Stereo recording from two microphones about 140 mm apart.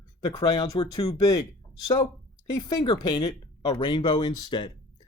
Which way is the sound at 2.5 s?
30° left (ahead or behind).